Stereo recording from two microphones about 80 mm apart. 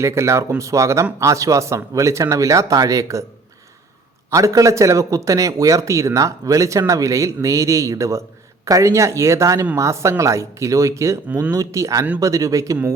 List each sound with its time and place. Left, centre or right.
0.0 s a man's voice: right
4.3 s a man's voice: right